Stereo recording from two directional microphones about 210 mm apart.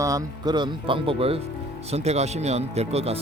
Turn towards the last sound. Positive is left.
turn(degrees=-30)  # may be behind; listen again after turning